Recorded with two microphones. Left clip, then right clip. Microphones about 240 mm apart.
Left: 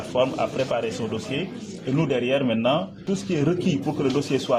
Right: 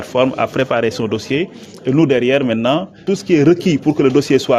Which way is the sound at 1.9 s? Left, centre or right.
Right.